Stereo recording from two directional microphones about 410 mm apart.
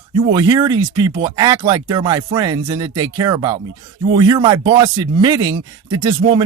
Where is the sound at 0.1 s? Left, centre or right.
Centre.